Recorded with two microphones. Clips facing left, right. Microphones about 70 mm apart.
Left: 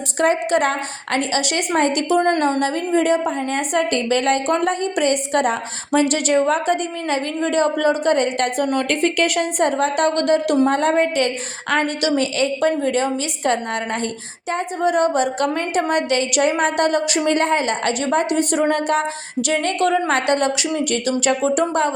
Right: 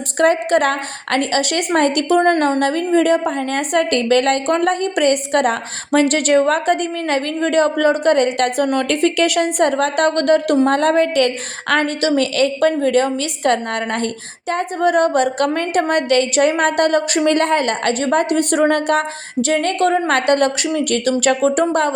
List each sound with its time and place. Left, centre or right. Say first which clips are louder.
0.2 s a woman's voice: right 3 dB; right
10.7 s a woman's voice: right 2 dB; right
12.1 s a woman's voice: right 3 dB; right
19.4 s a woman's voice: right 3 dB; right